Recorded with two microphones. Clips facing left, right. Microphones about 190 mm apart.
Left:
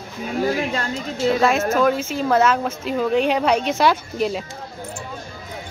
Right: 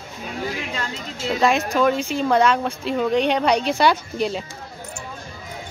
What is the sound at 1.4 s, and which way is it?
Speech, centre (ahead or behind).